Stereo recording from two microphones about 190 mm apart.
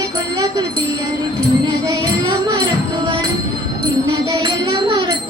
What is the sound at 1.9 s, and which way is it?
Music, 20° right (ahead or behind).